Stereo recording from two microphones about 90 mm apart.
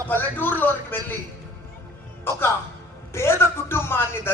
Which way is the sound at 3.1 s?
30° left (ahead or behind).